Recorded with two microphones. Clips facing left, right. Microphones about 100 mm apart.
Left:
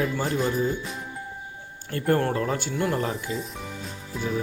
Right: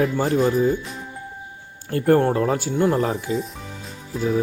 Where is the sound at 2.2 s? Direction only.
25° right (ahead or behind).